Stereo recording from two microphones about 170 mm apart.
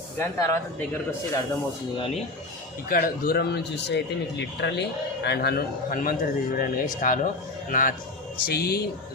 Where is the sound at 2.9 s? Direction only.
60° left (ahead or behind).